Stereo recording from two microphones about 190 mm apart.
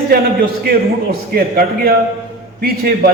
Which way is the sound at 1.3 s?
50° right (ahead or behind).